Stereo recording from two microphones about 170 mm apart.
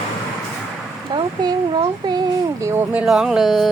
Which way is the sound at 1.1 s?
25° right (ahead or behind).